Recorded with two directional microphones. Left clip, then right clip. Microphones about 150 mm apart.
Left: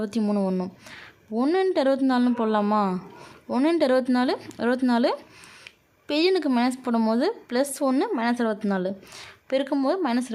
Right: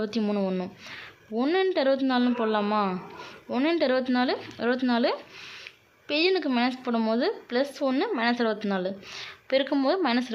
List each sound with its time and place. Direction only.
0.0 s speech: 40° left (ahead or behind)
9.5 s speech: 40° left (ahead or behind)